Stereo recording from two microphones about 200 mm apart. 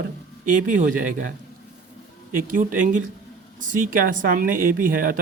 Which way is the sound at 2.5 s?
40° right (ahead or behind).